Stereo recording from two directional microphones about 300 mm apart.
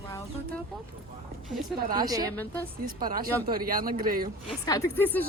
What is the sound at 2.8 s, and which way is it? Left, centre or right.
Speech, right.